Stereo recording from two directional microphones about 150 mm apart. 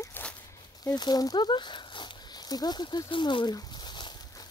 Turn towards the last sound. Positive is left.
turn(degrees=30)  # may be behind; listen again after turning